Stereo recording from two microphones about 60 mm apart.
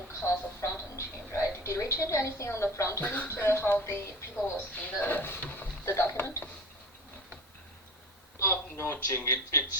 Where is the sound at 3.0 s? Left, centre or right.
Left.